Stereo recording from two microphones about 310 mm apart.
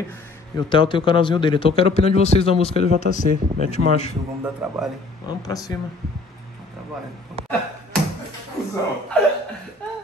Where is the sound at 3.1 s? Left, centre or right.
Right.